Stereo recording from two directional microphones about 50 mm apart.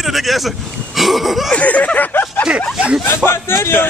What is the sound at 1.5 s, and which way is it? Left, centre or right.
Speech, left.